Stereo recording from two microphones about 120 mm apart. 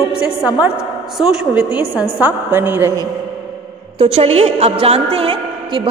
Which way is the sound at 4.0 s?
60° right (ahead or behind).